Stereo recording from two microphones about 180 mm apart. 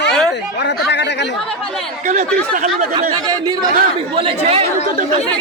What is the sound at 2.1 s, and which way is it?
Speech, 45° right (ahead or behind).